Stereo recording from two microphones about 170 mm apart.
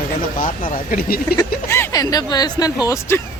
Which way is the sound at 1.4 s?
15° left (ahead or behind).